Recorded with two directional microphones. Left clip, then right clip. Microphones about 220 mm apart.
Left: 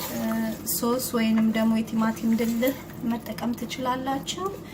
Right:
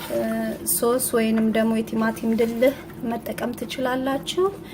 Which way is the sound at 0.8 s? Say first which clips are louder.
Right 5 dB; 45° right (ahead or behind).